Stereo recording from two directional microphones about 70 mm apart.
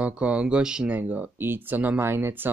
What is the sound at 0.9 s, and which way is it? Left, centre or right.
Speech, right.